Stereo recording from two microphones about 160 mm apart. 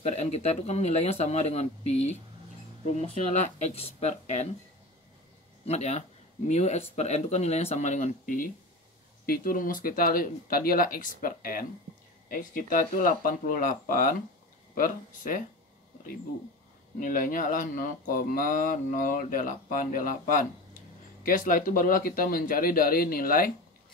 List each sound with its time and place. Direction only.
0.0 s speech: 45° left (ahead or behind)
5.7 s speech: 45° left (ahead or behind); by 15.4 s 60° left (ahead or behind)
17.0 s speech: 60° left (ahead or behind)